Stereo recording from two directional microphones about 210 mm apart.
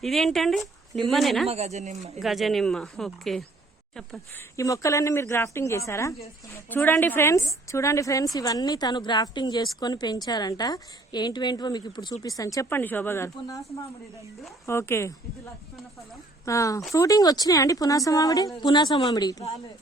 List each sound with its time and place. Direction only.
0.0 s a woman's voice: centre (ahead or behind)
1.5 s speech: 30° right (ahead or behind)
2.1 s a woman's voice: centre (ahead or behind)
4.5 s a woman's voice: 15° left (ahead or behind)
14.7 s a woman's voice: 10° left (ahead or behind)
16.5 s a woman's voice: 15° left (ahead or behind)